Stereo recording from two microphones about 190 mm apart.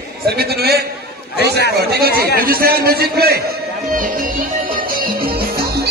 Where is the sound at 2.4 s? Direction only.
50° right (ahead or behind).